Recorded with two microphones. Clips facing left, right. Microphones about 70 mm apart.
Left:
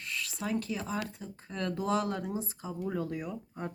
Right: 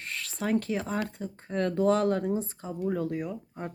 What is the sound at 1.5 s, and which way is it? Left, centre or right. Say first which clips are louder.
Speech: right 8 dB; right.